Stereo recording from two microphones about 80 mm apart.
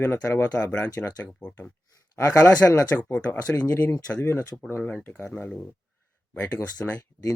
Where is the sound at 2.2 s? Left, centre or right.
Left.